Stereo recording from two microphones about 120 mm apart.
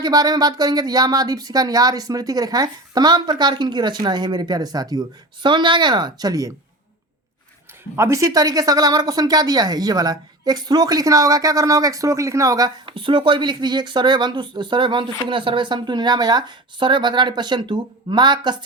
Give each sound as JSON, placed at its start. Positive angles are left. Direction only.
{"t": 0.0, "sound": "speech", "side_deg": -35}
{"t": 7.9, "sound": "speech", "side_deg": -25}
{"t": 12.8, "sound": "speech", "side_deg": -45}